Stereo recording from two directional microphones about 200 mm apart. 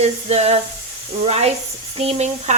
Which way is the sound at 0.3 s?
35° right (ahead or behind).